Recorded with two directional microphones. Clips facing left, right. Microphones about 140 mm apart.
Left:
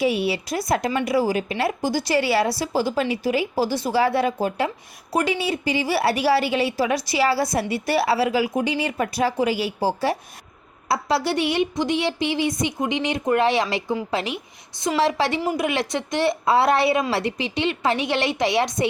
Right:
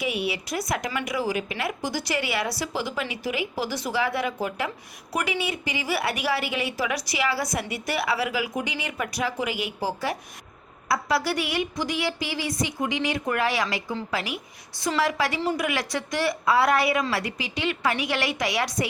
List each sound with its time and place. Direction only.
0.0 s a woman's voice: 30° left (ahead or behind)